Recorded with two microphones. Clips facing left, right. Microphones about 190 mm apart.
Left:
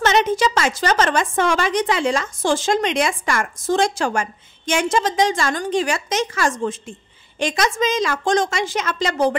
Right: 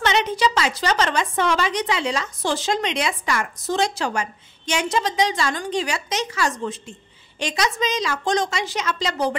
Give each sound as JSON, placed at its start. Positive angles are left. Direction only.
{"t": 0.0, "sound": "a woman's voice", "side_deg": 45}